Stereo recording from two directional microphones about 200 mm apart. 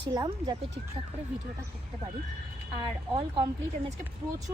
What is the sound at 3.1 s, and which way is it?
Speech, 25° right (ahead or behind).